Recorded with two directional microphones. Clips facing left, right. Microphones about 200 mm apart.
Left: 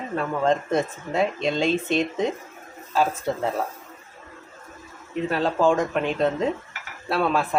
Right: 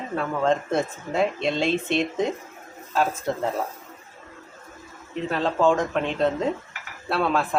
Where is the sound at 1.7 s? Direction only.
40° left (ahead or behind).